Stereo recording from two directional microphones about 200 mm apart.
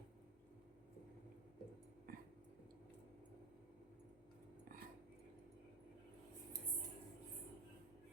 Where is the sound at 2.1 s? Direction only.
50° right (ahead or behind).